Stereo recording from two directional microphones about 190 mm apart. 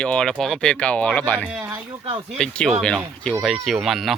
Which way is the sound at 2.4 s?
5° left (ahead or behind).